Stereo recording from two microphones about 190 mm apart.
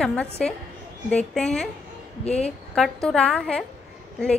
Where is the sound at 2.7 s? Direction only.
Centre (ahead or behind).